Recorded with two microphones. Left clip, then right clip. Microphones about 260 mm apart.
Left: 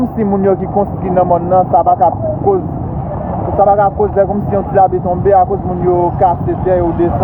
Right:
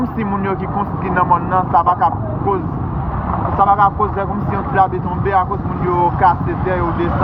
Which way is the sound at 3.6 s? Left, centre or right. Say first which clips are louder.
Left 3 dB; centre.